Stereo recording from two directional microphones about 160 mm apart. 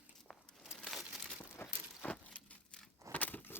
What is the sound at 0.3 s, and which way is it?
Crumpling, centre (ahead or behind).